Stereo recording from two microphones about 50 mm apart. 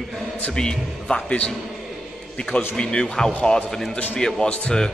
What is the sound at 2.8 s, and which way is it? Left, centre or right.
A man's voice, centre.